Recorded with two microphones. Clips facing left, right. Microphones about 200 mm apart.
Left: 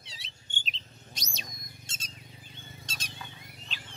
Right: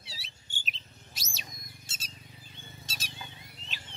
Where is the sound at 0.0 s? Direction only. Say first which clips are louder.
Right 1 dB; 5° right (ahead or behind).